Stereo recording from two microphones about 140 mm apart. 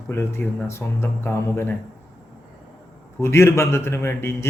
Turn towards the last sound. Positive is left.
turn(degrees=20)  # may be behind; listen again after turning